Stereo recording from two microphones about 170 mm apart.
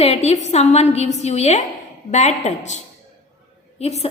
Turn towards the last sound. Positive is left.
turn(degrees=40)  # may be behind; listen again after turning